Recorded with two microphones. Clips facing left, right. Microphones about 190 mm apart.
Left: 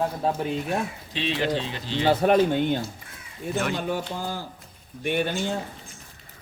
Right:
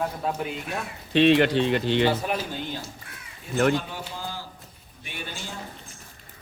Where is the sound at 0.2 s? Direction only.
30° left (ahead or behind).